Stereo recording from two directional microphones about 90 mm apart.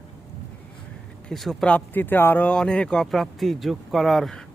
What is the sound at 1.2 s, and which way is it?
Speech, 5° left (ahead or behind).